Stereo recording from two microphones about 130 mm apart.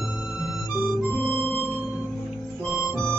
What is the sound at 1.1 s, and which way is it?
Music, 15° left (ahead or behind).